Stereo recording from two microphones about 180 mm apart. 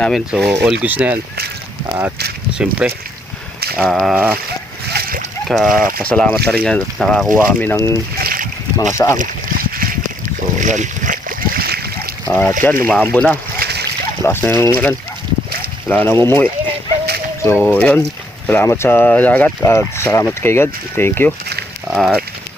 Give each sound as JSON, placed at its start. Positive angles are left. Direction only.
{"t": 0.0, "sound": "speech", "side_deg": 0}
{"t": 4.9, "sound": "splash", "side_deg": -55}
{"t": 5.5, "sound": "speech", "side_deg": 0}
{"t": 7.4, "sound": "speech", "side_deg": 10}
{"t": 8.2, "sound": "boat", "side_deg": -55}
{"t": 8.8, "sound": "speech", "side_deg": 15}
{"t": 9.1, "sound": "a sound", "side_deg": -50}
{"t": 10.6, "sound": "splash", "side_deg": -45}
{"t": 12.2, "sound": "speech", "side_deg": 10}
{"t": 13.6, "sound": "splash", "side_deg": -65}
{"t": 14.3, "sound": "speech", "side_deg": 15}
{"t": 15.9, "sound": "speech", "side_deg": 10}
{"t": 21.8, "sound": "speech", "side_deg": 0}